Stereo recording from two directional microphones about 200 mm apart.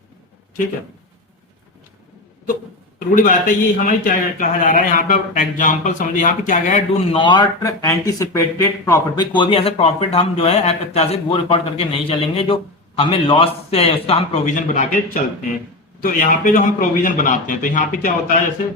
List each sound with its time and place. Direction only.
3.2 s a man's voice: 40° left (ahead or behind)